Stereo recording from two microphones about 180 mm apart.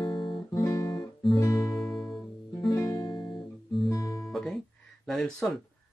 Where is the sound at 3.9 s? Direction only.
20° left (ahead or behind).